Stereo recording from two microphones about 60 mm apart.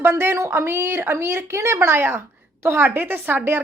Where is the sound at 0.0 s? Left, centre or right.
Right.